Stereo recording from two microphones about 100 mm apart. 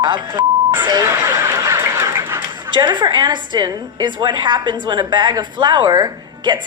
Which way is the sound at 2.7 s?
50° right (ahead or behind).